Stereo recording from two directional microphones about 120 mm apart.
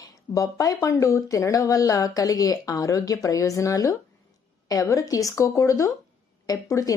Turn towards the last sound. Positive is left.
turn(degrees=30)  # may be behind; listen again after turning